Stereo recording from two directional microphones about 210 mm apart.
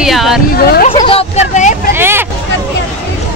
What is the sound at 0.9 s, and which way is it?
Speech, 25° left (ahead or behind).